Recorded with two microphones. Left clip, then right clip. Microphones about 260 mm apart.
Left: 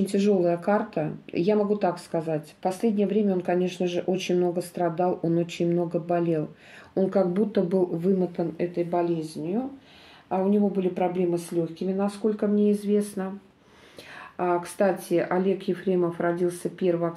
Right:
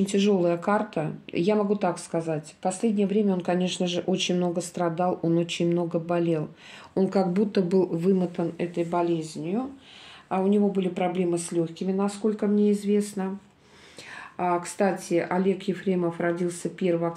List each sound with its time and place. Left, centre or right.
0.0 s speech: right
14.4 s speech: right